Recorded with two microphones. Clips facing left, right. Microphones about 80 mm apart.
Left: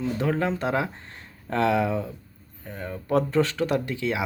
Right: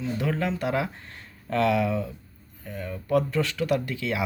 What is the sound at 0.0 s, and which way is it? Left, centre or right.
Speech, left.